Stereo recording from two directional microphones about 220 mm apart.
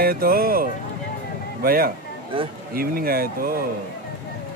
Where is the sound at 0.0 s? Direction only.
45° right (ahead or behind).